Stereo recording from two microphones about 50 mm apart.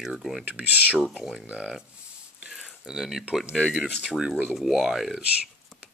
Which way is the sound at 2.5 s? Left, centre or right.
Centre.